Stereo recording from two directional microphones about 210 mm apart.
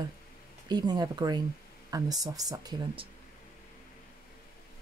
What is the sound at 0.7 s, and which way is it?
Speech, 20° right (ahead or behind).